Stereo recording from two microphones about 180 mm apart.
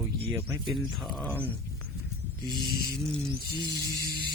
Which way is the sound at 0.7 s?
Centre (ahead or behind).